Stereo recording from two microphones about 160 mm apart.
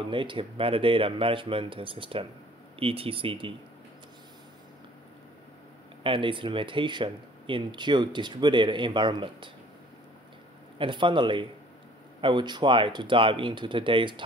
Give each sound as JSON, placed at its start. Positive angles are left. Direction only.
{"t": 0.1, "sound": "speech", "side_deg": -30}
{"t": 6.0, "sound": "speech", "side_deg": -30}
{"t": 10.8, "sound": "speech", "side_deg": -30}